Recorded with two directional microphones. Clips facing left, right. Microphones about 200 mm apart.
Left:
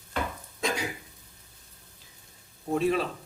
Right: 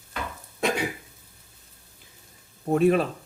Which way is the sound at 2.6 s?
55° right (ahead or behind).